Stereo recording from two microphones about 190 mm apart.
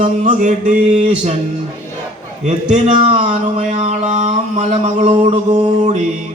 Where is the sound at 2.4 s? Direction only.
40° right (ahead or behind).